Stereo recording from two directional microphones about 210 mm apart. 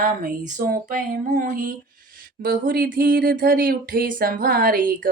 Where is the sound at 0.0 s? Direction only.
40° right (ahead or behind).